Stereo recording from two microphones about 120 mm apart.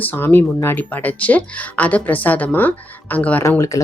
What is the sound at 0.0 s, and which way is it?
Speech, 15° left (ahead or behind).